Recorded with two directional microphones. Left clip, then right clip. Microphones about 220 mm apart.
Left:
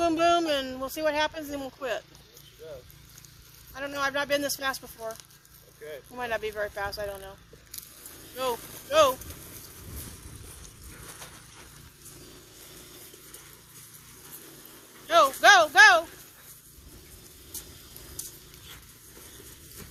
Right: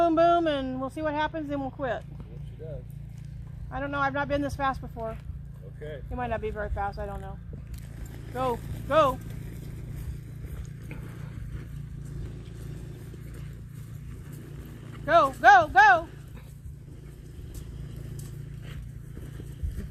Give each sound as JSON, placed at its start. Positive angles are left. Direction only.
{"t": 0.0, "sound": "speech", "side_deg": 50}
{"t": 3.8, "sound": "speech", "side_deg": 50}
{"t": 6.1, "sound": "speech", "side_deg": 50}
{"t": 8.4, "sound": "speech", "side_deg": 50}
{"t": 15.1, "sound": "speech", "side_deg": 50}